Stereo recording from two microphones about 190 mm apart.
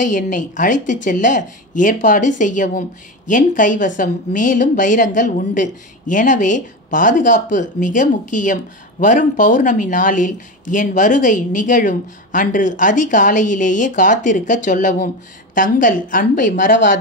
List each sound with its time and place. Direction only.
0.0 s a woman's voice: 40° left (ahead or behind)